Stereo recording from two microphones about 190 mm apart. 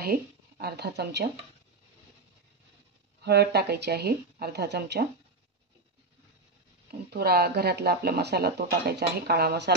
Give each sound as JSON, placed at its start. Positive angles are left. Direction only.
{"t": 0.0, "sound": "speech", "side_deg": -55}
{"t": 3.3, "sound": "speech", "side_deg": -60}
{"t": 6.9, "sound": "speech", "side_deg": -55}